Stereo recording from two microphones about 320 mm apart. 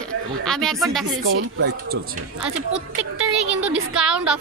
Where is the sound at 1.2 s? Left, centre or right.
Right.